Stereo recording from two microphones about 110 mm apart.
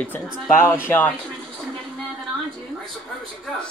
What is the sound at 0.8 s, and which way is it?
Speech, 15° left (ahead or behind).